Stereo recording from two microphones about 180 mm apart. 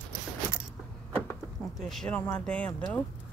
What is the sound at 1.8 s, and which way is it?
Speech, 5° left (ahead or behind).